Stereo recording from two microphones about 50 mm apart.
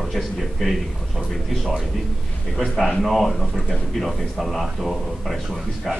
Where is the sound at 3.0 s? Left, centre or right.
Centre.